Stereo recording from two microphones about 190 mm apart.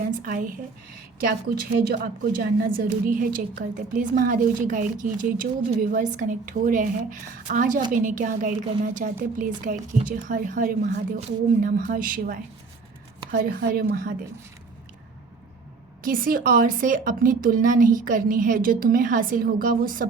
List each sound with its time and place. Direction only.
0.1 s a woman's voice: 45° right (ahead or behind)
1.9 s a woman's voice: 50° right (ahead or behind)
16.0 s a woman's voice: 50° right (ahead or behind)